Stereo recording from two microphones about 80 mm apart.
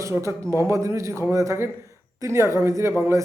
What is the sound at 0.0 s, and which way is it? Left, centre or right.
A man's voice, right.